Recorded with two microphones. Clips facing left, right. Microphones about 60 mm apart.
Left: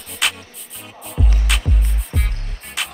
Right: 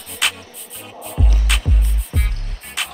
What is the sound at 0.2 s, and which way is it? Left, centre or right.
Music, centre.